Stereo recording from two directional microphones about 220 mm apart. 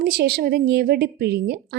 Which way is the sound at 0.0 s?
45° right (ahead or behind).